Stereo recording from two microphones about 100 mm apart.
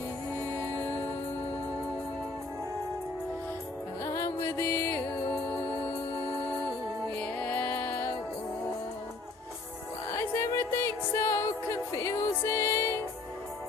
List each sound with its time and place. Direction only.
4.0 s music: 30° left (ahead or behind)
7.2 s music: 10° left (ahead or behind)
10.2 s music: 30° left (ahead or behind)